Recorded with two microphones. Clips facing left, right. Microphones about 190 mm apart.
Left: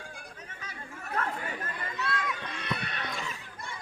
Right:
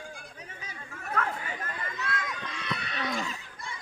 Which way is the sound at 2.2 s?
60° left (ahead or behind).